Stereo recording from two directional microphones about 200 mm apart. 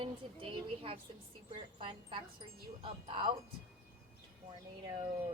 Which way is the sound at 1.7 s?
25° right (ahead or behind).